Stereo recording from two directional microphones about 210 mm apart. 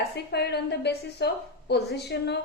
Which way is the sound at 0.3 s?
50° left (ahead or behind).